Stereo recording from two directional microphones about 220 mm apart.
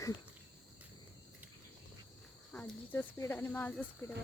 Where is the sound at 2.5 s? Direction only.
10° left (ahead or behind).